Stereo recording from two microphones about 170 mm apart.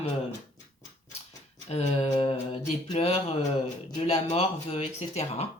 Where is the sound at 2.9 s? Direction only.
35° left (ahead or behind).